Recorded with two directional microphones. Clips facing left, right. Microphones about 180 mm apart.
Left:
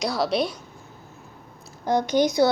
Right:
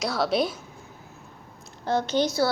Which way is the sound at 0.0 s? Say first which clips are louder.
Left 1 dB; centre (ahead or behind).